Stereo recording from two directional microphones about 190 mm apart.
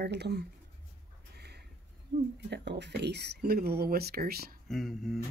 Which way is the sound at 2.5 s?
65° right (ahead or behind).